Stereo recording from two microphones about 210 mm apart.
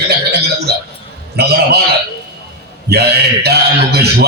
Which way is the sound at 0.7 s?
50° right (ahead or behind).